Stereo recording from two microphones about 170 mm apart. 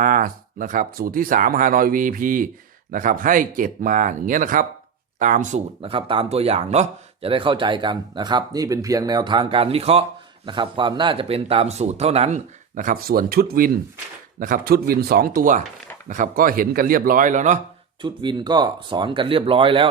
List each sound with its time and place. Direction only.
0.0 s speech: 55° right (ahead or behind)
18.0 s speech: 25° right (ahead or behind)